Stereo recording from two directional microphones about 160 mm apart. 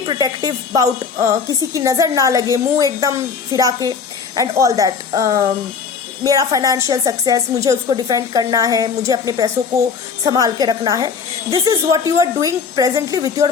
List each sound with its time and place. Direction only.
0.1 s a woman's voice: 25° right (ahead or behind)